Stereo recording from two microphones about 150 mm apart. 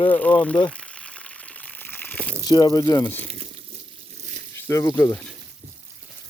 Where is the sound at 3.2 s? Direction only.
45° right (ahead or behind).